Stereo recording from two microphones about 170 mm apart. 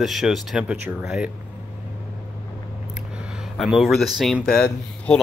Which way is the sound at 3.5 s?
Centre (ahead or behind).